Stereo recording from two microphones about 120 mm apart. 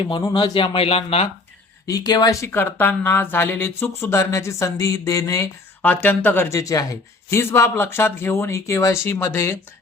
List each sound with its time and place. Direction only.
0.0 s speech: 40° left (ahead or behind)
1.9 s a man's voice: 35° left (ahead or behind)
5.8 s a man's voice: 15° left (ahead or behind)